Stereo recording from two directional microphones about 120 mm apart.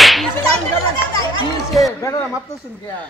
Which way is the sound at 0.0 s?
Centre (ahead or behind).